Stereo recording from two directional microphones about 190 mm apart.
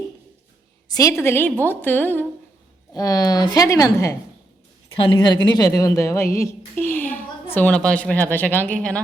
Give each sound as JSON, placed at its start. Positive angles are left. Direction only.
{"t": 0.9, "sound": "a woman's voice", "side_deg": 20}